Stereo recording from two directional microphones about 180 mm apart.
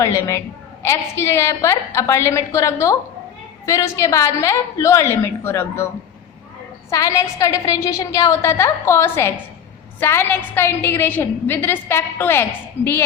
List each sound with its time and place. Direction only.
0.0 s a woman's voice: 15° left (ahead or behind)
6.9 s a woman's voice: 15° left (ahead or behind)